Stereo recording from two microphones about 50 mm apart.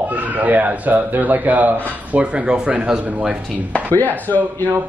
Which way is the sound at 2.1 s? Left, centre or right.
Right.